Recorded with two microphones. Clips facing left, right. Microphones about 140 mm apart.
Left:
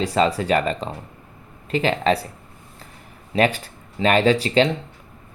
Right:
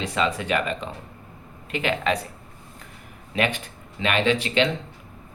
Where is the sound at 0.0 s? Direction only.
35° left (ahead or behind).